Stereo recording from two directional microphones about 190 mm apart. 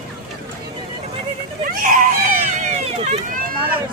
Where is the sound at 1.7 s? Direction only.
45° right (ahead or behind).